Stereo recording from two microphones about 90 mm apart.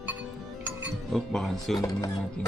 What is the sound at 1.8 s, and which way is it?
Speech, 40° left (ahead or behind).